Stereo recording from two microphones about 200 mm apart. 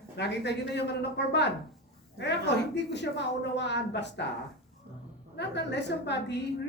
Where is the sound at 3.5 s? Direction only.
60° left (ahead or behind).